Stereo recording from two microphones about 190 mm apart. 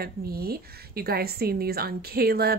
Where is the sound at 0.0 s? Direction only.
55° right (ahead or behind).